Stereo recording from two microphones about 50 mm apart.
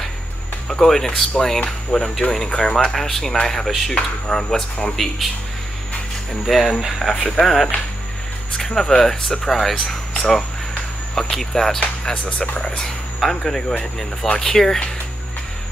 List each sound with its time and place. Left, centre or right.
0.7 s speech: centre
3.9 s speech: centre
4.9 s speech: centre
6.4 s speech: centre
12.1 s speech: centre
13.2 s speech: centre